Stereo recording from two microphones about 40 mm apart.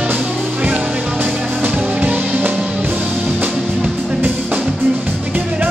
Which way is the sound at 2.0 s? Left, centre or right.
Right.